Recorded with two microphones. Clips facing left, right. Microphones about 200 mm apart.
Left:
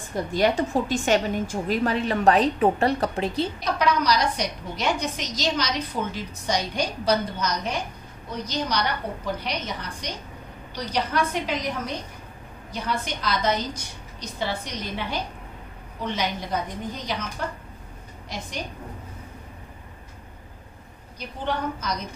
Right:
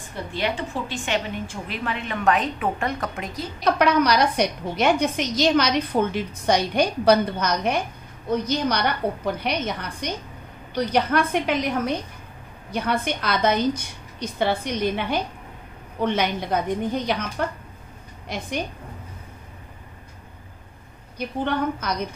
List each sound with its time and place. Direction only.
0.1 s a woman's voice: 40° left (ahead or behind)
3.7 s a woman's voice: 60° right (ahead or behind)
21.2 s a woman's voice: 60° right (ahead or behind)